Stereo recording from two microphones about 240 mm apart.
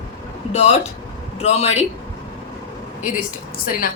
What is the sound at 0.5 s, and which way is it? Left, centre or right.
A woman's voice, left.